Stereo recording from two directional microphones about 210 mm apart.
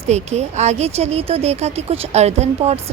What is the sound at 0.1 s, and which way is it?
A woman's voice, 30° right (ahead or behind).